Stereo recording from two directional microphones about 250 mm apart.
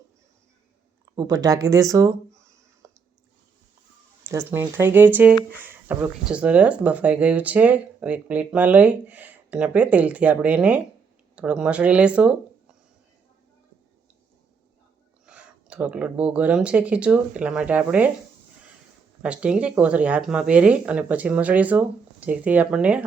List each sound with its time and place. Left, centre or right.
1.1 s speech: centre
2.8 s a sound: centre
4.2 s speech: centre
15.3 s speech: centre
19.2 s speech: centre